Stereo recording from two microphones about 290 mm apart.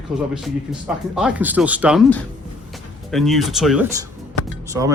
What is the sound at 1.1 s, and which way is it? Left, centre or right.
Speech, centre.